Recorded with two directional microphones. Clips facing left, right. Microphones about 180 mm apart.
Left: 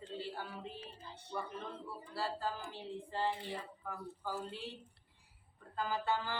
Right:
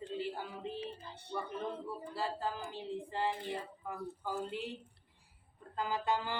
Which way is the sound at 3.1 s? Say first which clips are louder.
Even; 15° right (ahead or behind).